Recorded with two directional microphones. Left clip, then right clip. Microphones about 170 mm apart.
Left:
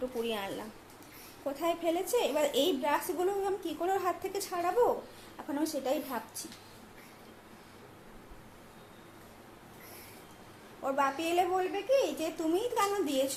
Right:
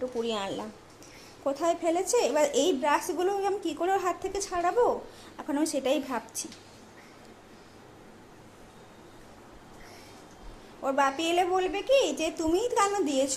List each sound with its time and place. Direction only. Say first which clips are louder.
0.2 s a woman's voice: right 5 dB; 25° right (ahead or behind)
5.5 s a woman's voice: right 5 dB; 30° right (ahead or behind)
10.8 s a woman's voice: right 4 dB; 25° right (ahead or behind)